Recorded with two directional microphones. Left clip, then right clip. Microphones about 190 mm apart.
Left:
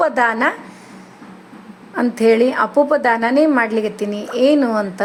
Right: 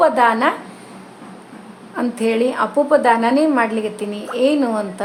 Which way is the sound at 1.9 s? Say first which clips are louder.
Left 5 dB; 25° left (ahead or behind).